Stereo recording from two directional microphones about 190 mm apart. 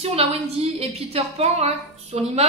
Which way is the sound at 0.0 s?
30° right (ahead or behind).